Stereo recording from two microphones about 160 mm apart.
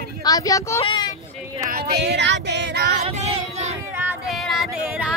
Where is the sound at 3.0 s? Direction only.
40° right (ahead or behind).